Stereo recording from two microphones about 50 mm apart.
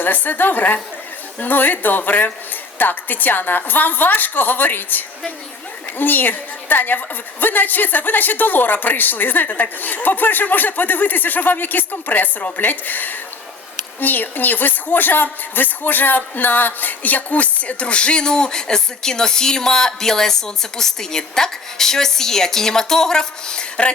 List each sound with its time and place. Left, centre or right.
0.0 s a woman's voice: left; by 23.9 s centre